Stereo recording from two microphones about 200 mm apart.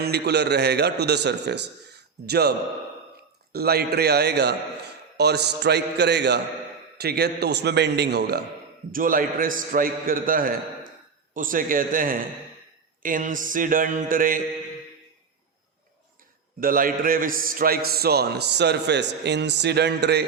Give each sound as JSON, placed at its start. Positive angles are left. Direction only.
{"t": 0.0, "sound": "a man's voice", "side_deg": -55}
{"t": 3.5, "sound": "a man's voice", "side_deg": -50}
{"t": 8.9, "sound": "a man's voice", "side_deg": -45}
{"t": 16.6, "sound": "a man's voice", "side_deg": -45}